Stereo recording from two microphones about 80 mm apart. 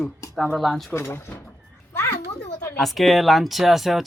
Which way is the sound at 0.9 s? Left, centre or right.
Left.